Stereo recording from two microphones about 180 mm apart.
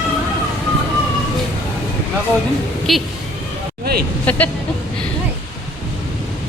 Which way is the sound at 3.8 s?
60° right (ahead or behind).